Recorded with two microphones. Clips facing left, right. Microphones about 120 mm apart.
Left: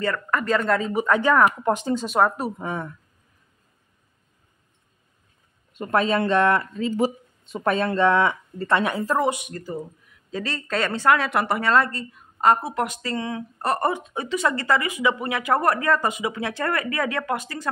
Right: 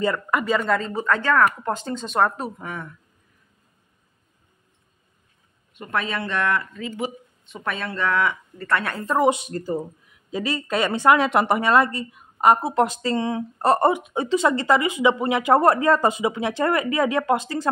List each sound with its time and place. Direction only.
0.0 s a woman's voice: 15° right (ahead or behind)
0.6 s speech: 5° left (ahead or behind)
2.6 s speech: 25° left (ahead or behind)
5.8 s speech: 35° left (ahead or behind); by 9.0 s 20° left (ahead or behind)
9.3 s speech: 30° right (ahead or behind)
10.3 s a woman's voice: 10° right (ahead or behind)
12.6 s speech: 30° right (ahead or behind)